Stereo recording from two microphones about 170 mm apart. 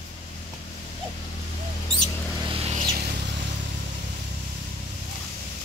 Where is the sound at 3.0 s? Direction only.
80° right.